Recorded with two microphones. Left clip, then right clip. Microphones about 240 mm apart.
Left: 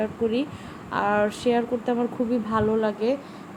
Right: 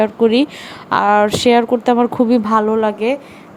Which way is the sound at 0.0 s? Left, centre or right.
Right.